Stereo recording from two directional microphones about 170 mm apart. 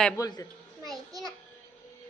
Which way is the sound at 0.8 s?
Centre (ahead or behind).